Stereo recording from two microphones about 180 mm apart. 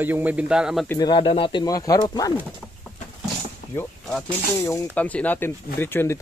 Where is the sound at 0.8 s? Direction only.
20° left (ahead or behind).